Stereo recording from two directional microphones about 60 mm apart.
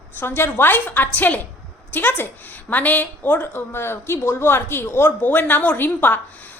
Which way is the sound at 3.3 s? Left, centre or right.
Left.